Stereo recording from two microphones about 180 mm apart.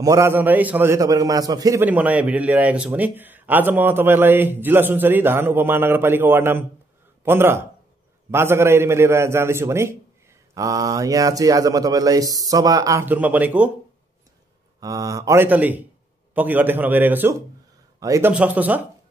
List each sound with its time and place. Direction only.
0.0 s a man's voice: 15° right (ahead or behind)
14.8 s a man's voice: 20° right (ahead or behind)
18.3 s a man's voice: 10° right (ahead or behind)